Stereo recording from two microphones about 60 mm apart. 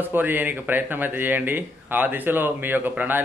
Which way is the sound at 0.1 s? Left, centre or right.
Right.